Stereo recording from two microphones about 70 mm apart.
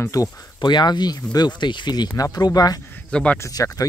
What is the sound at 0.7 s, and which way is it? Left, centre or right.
Speech, left.